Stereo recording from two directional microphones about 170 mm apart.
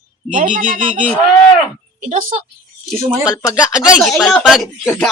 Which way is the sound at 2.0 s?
45° right (ahead or behind).